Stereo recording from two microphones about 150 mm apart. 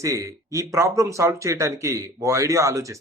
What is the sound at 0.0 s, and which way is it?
Speech, 20° right (ahead or behind).